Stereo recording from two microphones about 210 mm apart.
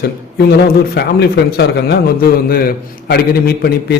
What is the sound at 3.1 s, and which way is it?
Speech, 50° left (ahead or behind).